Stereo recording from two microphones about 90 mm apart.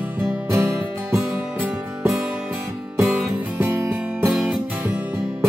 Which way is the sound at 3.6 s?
25° right (ahead or behind).